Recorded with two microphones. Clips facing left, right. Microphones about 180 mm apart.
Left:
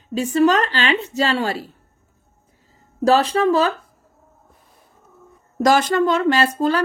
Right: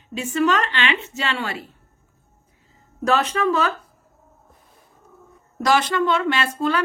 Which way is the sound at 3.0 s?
35° left (ahead or behind).